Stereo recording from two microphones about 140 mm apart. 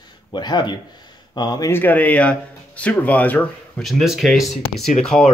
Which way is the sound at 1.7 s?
15° left (ahead or behind).